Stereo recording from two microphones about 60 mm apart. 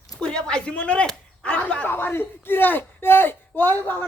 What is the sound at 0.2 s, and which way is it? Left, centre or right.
Speech, centre.